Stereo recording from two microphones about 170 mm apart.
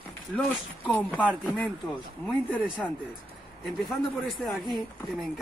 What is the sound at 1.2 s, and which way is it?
Speech, 5° right (ahead or behind).